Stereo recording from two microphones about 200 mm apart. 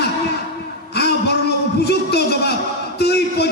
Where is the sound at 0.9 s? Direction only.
55° left (ahead or behind).